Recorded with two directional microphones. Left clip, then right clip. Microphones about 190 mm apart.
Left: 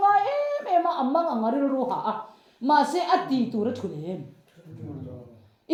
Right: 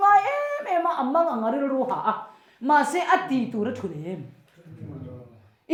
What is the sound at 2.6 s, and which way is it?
Speech, 30° right (ahead or behind).